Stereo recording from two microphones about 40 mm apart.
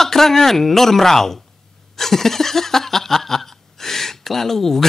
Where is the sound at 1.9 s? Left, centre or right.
Centre.